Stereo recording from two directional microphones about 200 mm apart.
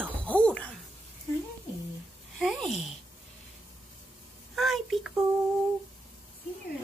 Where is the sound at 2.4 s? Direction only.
Centre (ahead or behind).